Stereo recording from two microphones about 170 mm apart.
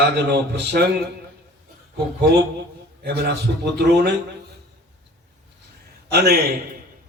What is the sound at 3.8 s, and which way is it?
Speech, 75° right (ahead or behind).